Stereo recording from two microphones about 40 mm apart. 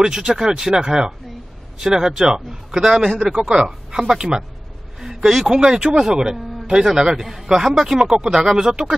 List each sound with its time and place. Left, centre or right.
0.0 s speech: centre
5.0 s a sound: centre
5.5 s speech: right